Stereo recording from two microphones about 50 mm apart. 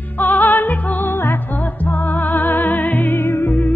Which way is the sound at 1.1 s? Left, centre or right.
Left.